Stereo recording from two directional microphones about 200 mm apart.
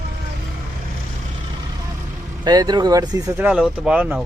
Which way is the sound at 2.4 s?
20° right (ahead or behind).